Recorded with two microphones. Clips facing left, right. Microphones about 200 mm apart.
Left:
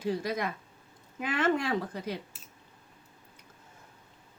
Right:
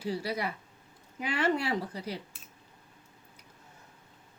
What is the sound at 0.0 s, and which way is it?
Speech, 10° right (ahead or behind).